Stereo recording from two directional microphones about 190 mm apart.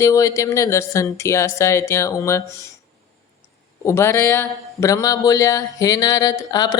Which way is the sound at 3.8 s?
15° left (ahead or behind).